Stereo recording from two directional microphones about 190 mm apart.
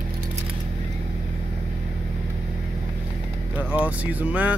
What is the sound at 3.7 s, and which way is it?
Speech, 10° right (ahead or behind).